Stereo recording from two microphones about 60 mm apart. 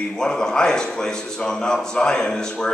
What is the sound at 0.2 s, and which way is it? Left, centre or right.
A man's voice, centre.